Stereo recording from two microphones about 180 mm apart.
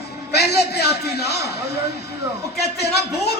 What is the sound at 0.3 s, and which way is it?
A man's voice, 65° left (ahead or behind).